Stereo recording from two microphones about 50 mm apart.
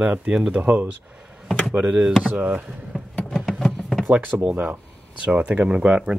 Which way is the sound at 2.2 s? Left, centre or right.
Right.